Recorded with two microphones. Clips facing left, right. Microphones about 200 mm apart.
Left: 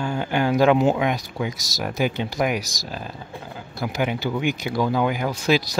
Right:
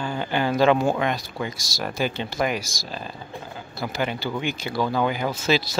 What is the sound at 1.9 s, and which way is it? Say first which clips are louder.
Speech: left 2 dB; 15° left (ahead or behind).